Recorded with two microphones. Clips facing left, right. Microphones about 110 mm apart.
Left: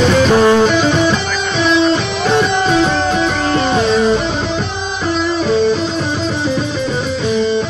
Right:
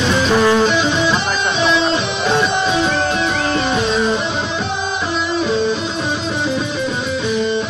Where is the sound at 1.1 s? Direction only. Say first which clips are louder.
Left 1 dB; 40° right (ahead or behind).